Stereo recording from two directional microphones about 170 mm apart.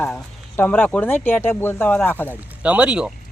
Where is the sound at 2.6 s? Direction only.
10° right (ahead or behind).